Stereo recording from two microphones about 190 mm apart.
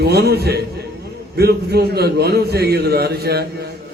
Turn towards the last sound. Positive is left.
turn(degrees=-55)  # may be behind; listen again after turning